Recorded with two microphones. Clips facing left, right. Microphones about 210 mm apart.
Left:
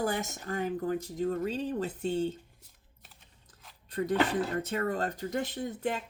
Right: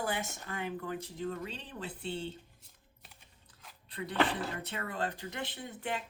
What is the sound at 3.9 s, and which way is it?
Speech, 45° left (ahead or behind).